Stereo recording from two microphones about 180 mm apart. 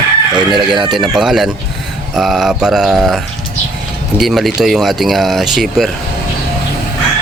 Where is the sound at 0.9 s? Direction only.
Centre (ahead or behind).